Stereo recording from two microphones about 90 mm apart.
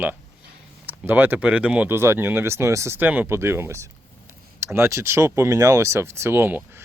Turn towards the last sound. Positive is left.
turn(degrees=-25)  # may be behind; listen again after turning